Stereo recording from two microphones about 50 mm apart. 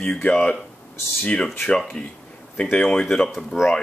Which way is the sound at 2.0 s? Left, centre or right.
Centre.